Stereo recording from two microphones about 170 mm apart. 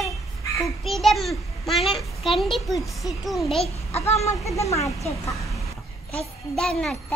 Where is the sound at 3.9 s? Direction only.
40° left (ahead or behind).